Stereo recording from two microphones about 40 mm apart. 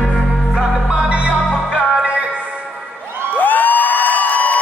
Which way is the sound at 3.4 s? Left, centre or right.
Left.